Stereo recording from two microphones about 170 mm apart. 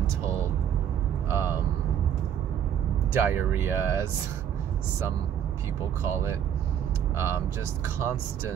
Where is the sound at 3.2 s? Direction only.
10° right (ahead or behind).